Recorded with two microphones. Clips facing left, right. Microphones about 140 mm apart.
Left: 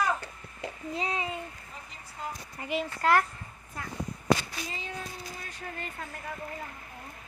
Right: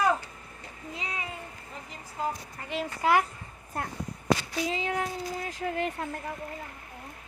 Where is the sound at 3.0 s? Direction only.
10° right (ahead or behind).